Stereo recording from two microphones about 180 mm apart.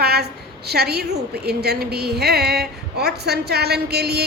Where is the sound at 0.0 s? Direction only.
65° right (ahead or behind).